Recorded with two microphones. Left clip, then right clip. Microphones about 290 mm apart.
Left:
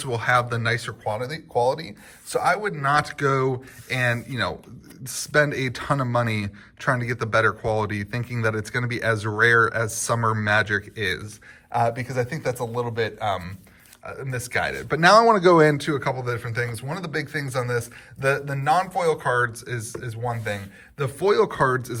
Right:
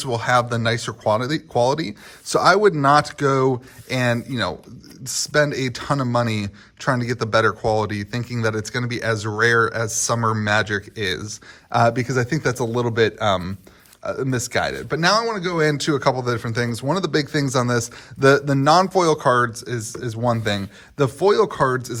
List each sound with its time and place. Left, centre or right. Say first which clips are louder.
0.0 s a man's voice: right 2 dB; centre
11.9 s a man's voice: right 5 dB; right
21.0 s a man's voice: right 3 dB; centre